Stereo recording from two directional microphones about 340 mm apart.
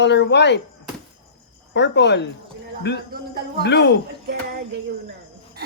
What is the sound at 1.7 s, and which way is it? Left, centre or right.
Speech, left.